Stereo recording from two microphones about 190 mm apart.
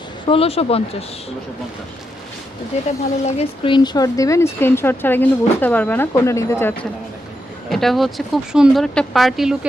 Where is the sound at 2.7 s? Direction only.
35° left (ahead or behind); by 6.9 s 10° left (ahead or behind).